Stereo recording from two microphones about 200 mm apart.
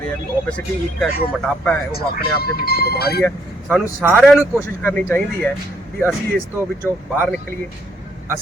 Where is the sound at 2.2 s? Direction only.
50° left (ahead or behind).